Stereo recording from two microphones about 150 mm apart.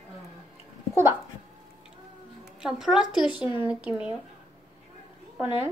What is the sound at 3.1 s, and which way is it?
Speech, 30° left (ahead or behind).